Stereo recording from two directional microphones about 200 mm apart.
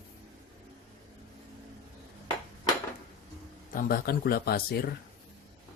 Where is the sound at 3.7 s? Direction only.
50° left (ahead or behind).